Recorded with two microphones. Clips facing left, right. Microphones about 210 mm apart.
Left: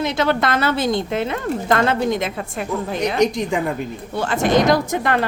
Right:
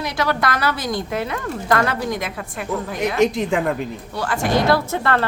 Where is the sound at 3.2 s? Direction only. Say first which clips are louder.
Right 1 dB; centre (ahead or behind).